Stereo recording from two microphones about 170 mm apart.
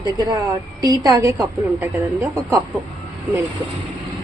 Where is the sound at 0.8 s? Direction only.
20° right (ahead or behind).